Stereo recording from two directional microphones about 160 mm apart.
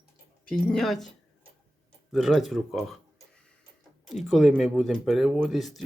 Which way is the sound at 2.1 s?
Centre (ahead or behind).